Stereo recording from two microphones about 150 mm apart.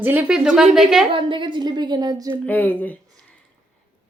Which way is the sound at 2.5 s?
10° left (ahead or behind).